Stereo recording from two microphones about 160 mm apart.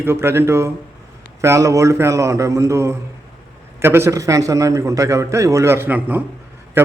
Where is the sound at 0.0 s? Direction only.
15° right (ahead or behind).